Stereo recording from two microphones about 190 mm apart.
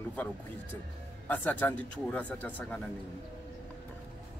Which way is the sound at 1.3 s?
10° left (ahead or behind).